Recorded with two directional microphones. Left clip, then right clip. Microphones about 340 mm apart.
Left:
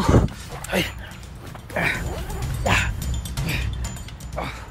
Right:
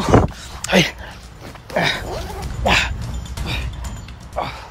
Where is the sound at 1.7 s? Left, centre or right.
Right.